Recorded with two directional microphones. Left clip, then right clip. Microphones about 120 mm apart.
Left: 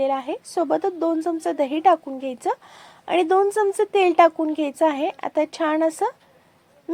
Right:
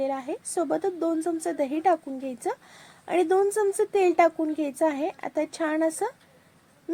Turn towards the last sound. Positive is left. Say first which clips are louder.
# left 5 dB
turn(degrees=15)  # may be behind; listen again after turning